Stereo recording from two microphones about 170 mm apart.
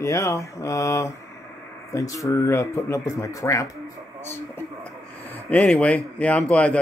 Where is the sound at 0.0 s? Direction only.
15° left (ahead or behind).